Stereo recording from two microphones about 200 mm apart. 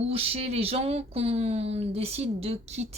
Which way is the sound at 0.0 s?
30° right (ahead or behind).